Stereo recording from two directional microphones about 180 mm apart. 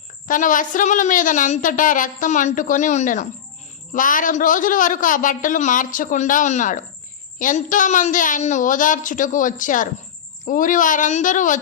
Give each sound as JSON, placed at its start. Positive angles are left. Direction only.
{"t": 0.3, "sound": "a woman's voice", "side_deg": 45}